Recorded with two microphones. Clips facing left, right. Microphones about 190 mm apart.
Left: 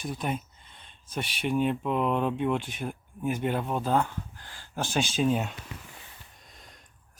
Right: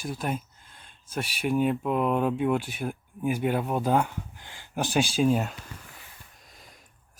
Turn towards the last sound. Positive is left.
turn(degrees=0)  # may be behind; listen again after turning